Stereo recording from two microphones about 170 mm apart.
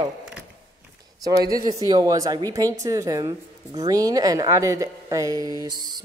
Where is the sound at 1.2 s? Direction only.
20° right (ahead or behind).